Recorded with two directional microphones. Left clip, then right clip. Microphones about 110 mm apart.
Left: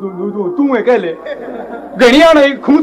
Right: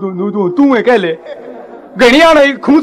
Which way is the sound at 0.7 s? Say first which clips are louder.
Right 1 dB; 45° right (ahead or behind).